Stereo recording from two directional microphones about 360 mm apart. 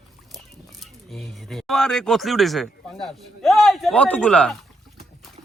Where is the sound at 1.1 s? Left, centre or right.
Centre.